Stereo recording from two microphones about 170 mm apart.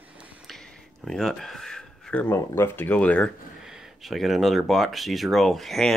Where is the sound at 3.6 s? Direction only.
5° right (ahead or behind).